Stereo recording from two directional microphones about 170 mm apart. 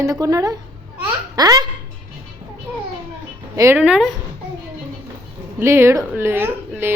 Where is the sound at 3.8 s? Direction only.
5° right (ahead or behind).